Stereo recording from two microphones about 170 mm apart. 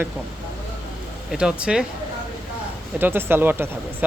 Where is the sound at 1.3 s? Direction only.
5° right (ahead or behind).